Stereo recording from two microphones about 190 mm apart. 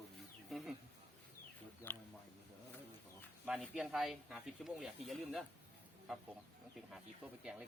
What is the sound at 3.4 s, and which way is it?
Speech, 5° right (ahead or behind).